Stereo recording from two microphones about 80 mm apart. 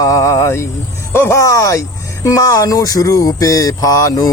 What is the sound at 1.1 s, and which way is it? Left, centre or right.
Music, left.